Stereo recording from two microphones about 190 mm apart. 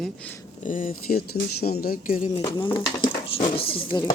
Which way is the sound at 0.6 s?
45° left (ahead or behind).